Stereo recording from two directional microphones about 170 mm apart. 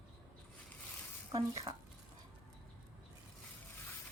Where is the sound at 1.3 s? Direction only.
20° right (ahead or behind).